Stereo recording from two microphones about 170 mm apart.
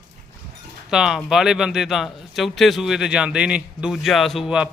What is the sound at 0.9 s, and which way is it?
A man's voice, 5° right (ahead or behind).